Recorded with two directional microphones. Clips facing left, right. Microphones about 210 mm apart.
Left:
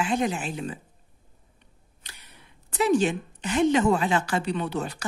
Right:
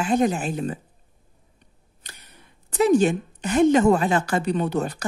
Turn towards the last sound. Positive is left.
turn(degrees=-45)  # may be behind; listen again after turning